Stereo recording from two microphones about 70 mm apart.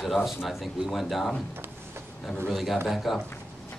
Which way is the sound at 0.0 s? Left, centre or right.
Centre.